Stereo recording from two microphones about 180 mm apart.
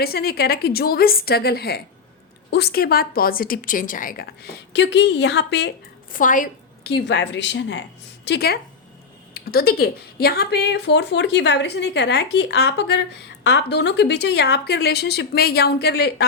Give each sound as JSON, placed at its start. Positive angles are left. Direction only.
{"t": 0.0, "sound": "a woman's voice", "side_deg": 60}
{"t": 6.1, "sound": "a woman's voice", "side_deg": 45}
{"t": 6.8, "sound": "a woman's voice", "side_deg": 70}
{"t": 8.2, "sound": "a woman's voice", "side_deg": 65}